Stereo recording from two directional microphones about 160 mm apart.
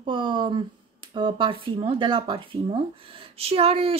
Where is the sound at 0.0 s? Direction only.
30° right (ahead or behind).